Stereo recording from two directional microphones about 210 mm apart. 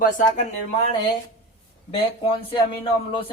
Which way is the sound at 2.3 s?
25° left (ahead or behind).